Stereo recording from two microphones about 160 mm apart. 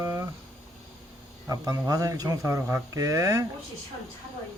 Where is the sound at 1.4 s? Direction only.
20° right (ahead or behind).